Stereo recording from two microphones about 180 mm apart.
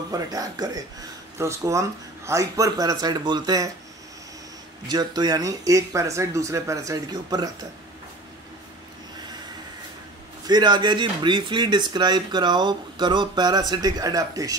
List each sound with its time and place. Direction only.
0.1 s speech: 20° right (ahead or behind)
4.8 s speech: 20° right (ahead or behind)
10.4 s speech: 25° right (ahead or behind)